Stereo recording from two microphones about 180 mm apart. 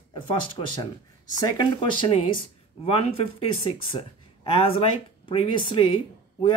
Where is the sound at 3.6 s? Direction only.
30° left (ahead or behind).